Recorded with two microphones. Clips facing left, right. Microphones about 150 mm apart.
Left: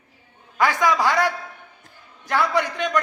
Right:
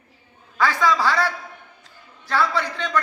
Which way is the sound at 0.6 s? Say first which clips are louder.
Left 1 dB; 15° left (ahead or behind).